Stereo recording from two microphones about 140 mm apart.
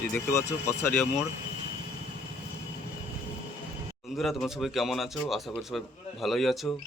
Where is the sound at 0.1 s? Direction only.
20° left (ahead or behind).